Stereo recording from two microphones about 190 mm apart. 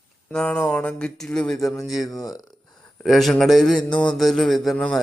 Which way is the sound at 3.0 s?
Centre (ahead or behind).